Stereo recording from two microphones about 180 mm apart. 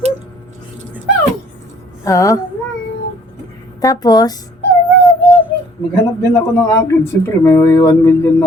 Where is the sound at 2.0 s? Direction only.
20° left (ahead or behind).